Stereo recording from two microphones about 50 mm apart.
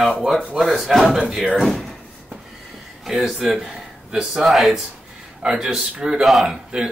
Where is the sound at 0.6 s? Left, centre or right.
Centre.